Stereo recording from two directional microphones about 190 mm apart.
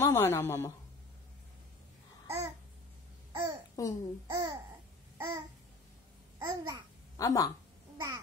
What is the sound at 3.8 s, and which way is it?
Speech, 15° left (ahead or behind).